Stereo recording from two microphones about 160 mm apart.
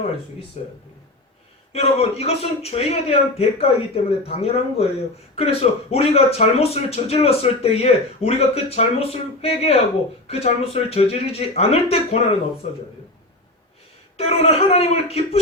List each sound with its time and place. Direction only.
0.6 s speech: 40° left (ahead or behind)
1.7 s speech: 40° left (ahead or behind)
14.2 s speech: 40° left (ahead or behind)